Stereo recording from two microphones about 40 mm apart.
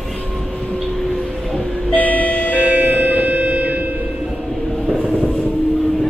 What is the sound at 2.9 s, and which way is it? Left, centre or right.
Music, right.